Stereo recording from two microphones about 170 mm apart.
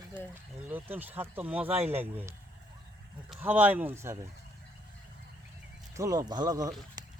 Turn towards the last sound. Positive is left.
turn(degrees=-20)  # may be behind; listen again after turning